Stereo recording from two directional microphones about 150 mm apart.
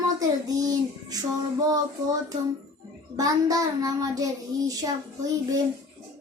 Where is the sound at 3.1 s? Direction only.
25° right (ahead or behind).